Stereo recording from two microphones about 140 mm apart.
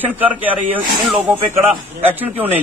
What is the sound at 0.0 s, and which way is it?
Speech, 10° right (ahead or behind).